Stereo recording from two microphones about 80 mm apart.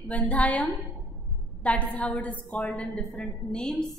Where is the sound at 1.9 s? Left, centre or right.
Centre.